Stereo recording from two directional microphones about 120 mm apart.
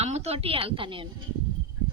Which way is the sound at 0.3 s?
50° right (ahead or behind).